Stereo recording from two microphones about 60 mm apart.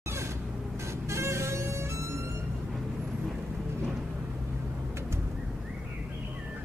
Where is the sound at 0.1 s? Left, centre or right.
Right.